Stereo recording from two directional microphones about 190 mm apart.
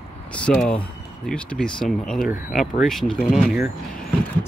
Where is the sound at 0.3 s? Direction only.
5° left (ahead or behind).